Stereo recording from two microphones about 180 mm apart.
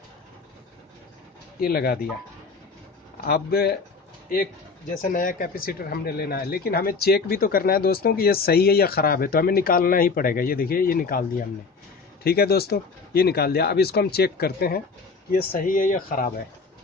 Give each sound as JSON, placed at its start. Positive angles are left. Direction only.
{"t": 1.6, "sound": "speech", "side_deg": 55}
{"t": 3.2, "sound": "speech", "side_deg": 60}
{"t": 5.1, "sound": "speech", "side_deg": 50}
{"t": 15.3, "sound": "speech", "side_deg": 45}